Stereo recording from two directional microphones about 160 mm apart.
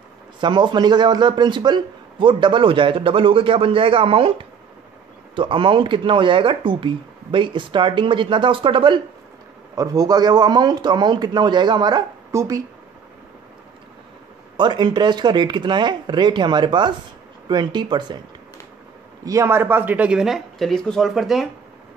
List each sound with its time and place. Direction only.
0.4 s a man's voice: 30° right (ahead or behind)
14.6 s speech: 30° right (ahead or behind)
19.2 s speech: 15° right (ahead or behind); by 21.5 s centre (ahead or behind)